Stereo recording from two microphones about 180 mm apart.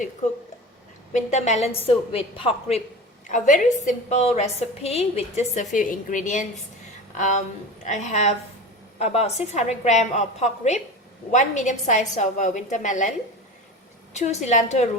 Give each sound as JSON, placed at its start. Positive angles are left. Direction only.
{"t": 1.1, "sound": "a woman's voice", "side_deg": 40}
{"t": 3.2, "sound": "a woman's voice", "side_deg": 45}